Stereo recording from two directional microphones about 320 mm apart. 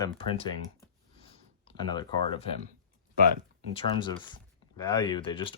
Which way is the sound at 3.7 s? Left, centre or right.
Centre.